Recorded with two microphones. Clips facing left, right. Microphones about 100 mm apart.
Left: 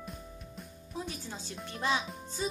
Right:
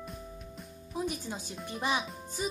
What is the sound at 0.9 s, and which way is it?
Speech, 15° right (ahead or behind).